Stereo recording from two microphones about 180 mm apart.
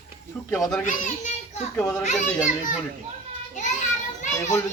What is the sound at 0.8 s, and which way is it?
Speech, 45° left (ahead or behind).